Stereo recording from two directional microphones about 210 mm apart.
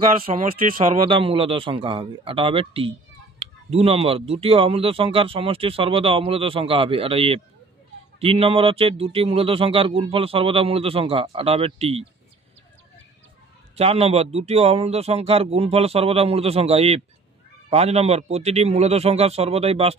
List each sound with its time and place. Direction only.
0.3 s speech: 30° right (ahead or behind)
13.7 s speech: 30° right (ahead or behind)